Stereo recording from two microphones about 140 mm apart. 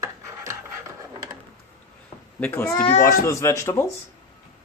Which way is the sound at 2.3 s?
15° left (ahead or behind).